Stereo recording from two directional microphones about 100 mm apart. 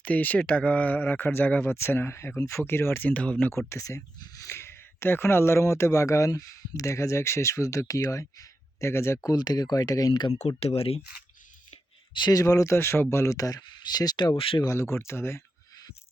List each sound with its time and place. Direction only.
0.0 s speech: 15° left (ahead or behind)
3.7 s speech: 30° left (ahead or behind)
9.3 s speech: 45° left (ahead or behind)
10.6 s speech: 80° left
12.1 s speech: 40° left (ahead or behind)
14.3 s speech: 70° left (ahead or behind)
14.6 s speech: 30° left (ahead or behind)